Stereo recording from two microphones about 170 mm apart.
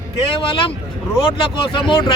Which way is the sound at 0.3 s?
30° left (ahead or behind).